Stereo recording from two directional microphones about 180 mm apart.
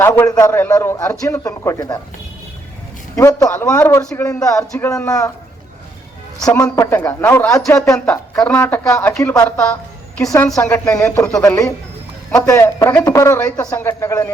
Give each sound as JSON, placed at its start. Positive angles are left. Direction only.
{"t": 0.0, "sound": "a man's voice", "side_deg": 15}
{"t": 3.2, "sound": "a man's voice", "side_deg": 15}
{"t": 6.4, "sound": "a man's voice", "side_deg": 15}